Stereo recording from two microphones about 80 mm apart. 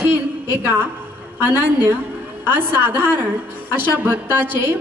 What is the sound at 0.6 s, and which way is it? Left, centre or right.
A woman's voice, right.